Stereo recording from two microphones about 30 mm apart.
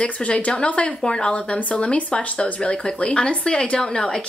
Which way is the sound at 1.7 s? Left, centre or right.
Left.